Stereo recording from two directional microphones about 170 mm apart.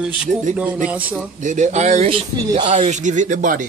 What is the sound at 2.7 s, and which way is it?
Speech, 45° right (ahead or behind).